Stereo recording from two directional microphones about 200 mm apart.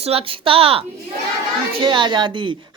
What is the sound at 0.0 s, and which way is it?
A woman's voice, 30° right (ahead or behind).